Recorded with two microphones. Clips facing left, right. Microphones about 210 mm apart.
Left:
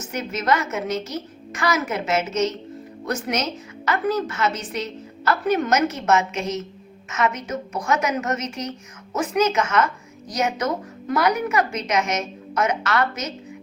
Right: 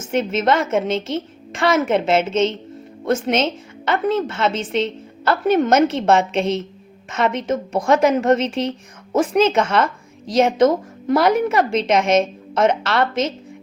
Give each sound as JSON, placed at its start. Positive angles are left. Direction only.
{"t": 0.1, "sound": "a woman's voice", "side_deg": -25}